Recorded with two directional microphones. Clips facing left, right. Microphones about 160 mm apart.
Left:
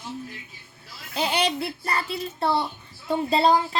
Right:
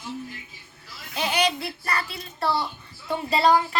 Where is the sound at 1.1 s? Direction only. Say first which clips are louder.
Even; 30° left (ahead or behind).